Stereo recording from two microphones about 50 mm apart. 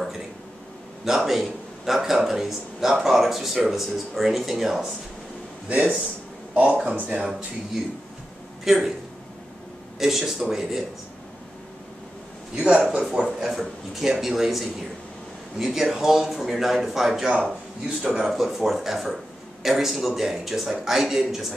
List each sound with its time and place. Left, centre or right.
1.0 s speech: centre
5.7 s speech: right
7.2 s a man's voice: centre
8.6 s speech: centre
9.9 s a man's voice: centre
12.5 s a man's voice: centre
17.8 s speech: centre
18.2 s speech: centre